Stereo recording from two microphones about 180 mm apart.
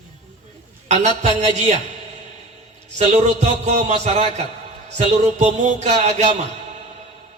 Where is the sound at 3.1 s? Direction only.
40° right (ahead or behind).